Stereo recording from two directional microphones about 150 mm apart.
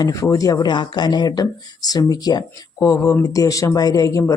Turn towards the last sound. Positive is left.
turn(degrees=25)  # may be behind; listen again after turning